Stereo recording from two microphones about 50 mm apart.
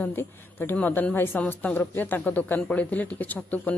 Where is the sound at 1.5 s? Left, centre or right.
Left.